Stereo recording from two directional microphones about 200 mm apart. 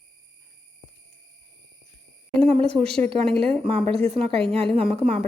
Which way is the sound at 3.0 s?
25° right (ahead or behind).